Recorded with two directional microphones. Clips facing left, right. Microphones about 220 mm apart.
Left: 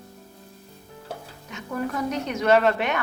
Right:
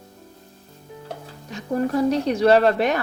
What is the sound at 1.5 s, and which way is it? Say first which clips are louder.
Speech: right 6 dB; 35° right (ahead or behind).